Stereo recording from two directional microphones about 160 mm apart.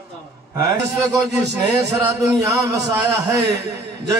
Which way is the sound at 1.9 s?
20° right (ahead or behind).